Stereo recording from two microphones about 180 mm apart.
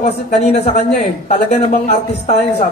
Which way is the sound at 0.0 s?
40° left (ahead or behind).